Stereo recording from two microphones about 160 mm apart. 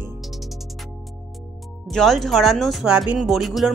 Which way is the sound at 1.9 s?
Centre (ahead or behind).